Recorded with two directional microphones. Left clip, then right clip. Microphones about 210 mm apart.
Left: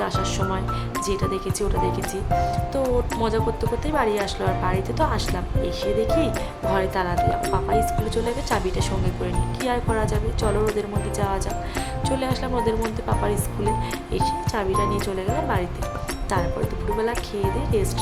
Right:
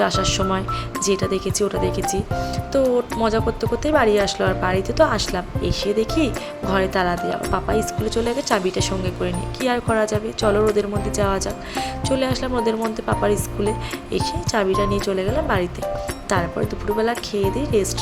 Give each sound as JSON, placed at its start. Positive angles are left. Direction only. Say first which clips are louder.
{"t": 0.0, "sound": "speech", "louder": "right 5 dB", "side_deg": -20}
{"t": 17.0, "sound": "speech", "louder": "right 4 dB", "side_deg": -15}